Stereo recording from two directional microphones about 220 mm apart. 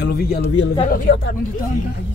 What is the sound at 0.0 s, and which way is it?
Speech, 45° left (ahead or behind).